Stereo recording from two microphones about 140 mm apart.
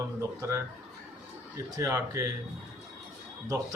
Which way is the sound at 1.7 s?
20° right (ahead or behind).